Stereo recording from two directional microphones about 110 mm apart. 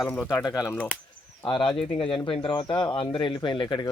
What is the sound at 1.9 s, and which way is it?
Speech, 55° left (ahead or behind).